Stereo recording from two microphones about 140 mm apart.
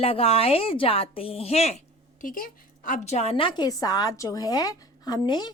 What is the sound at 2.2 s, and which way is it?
A woman's voice, 85° left.